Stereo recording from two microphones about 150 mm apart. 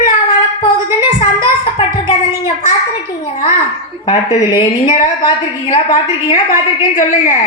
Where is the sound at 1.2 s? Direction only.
40° left (ahead or behind).